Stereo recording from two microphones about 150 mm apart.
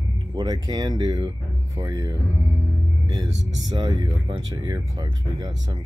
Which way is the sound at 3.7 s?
25° right (ahead or behind).